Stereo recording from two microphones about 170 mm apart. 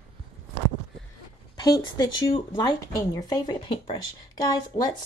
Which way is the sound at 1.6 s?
20° left (ahead or behind).